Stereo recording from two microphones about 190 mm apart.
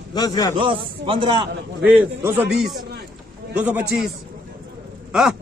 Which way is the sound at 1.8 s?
10° right (ahead or behind).